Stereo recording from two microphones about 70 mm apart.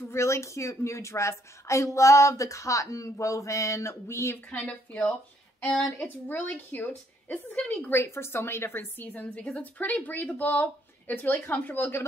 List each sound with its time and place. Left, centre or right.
0.1 s a woman's voice: left
4.5 s a woman's voice: centre
5.6 s a woman's voice: centre
6.0 s a woman's voice: left
7.9 s a woman's voice: left